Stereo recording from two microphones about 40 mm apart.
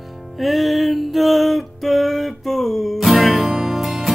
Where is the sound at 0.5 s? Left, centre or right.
Centre.